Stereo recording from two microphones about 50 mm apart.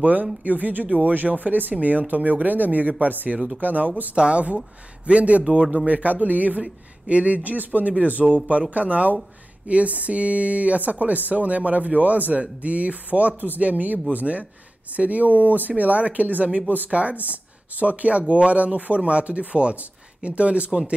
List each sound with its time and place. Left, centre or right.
0.0 s speech: right